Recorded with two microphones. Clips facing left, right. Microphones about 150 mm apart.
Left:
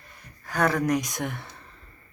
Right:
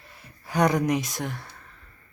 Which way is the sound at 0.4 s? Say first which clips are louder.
Right 2 dB; 10° right (ahead or behind).